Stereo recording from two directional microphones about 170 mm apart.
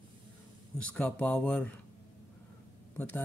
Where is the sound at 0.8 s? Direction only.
10° left (ahead or behind).